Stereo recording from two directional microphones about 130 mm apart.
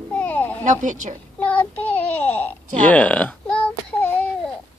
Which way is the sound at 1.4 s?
10° left (ahead or behind).